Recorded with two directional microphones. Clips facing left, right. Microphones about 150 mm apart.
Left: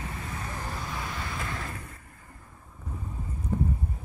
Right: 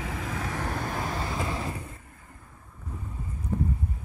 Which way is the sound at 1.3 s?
20° right (ahead or behind).